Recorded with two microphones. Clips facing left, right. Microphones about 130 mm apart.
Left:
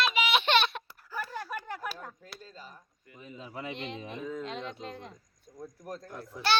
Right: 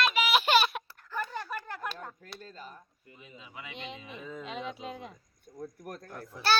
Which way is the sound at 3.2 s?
40° left (ahead or behind).